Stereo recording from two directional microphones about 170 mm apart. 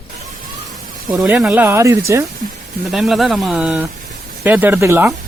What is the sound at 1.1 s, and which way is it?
Speech, 5° right (ahead or behind).